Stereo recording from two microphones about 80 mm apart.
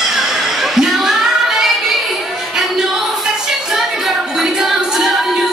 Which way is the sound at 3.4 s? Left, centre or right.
Centre.